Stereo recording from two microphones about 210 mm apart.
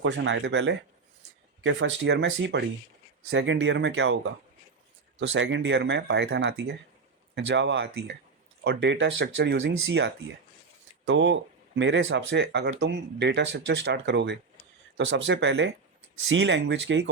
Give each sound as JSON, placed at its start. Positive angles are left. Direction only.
{"t": 0.0, "sound": "speech", "side_deg": -60}
{"t": 5.3, "sound": "speech", "side_deg": -60}